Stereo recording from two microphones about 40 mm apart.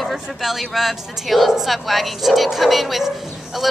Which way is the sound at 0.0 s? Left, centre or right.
Centre.